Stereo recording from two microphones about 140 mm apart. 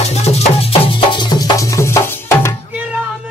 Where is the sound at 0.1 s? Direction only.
50° left (ahead or behind); by 2.5 s 15° left (ahead or behind).